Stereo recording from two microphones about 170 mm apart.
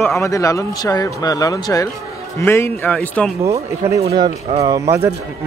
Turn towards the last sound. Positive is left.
turn(degrees=-15)  # may be behind; listen again after turning